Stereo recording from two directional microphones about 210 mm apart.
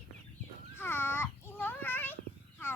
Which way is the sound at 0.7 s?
10° left (ahead or behind).